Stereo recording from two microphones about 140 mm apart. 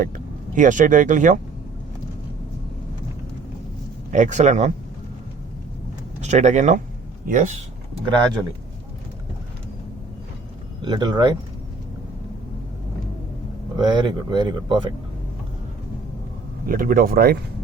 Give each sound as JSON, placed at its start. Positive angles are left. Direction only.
{"t": 0.5, "sound": "speech", "side_deg": -65}
{"t": 4.1, "sound": "speech", "side_deg": -60}
{"t": 6.2, "sound": "speech", "side_deg": -55}
{"t": 10.8, "sound": "speech", "side_deg": -30}
{"t": 13.7, "sound": "speech", "side_deg": -30}
{"t": 16.6, "sound": "speech", "side_deg": -85}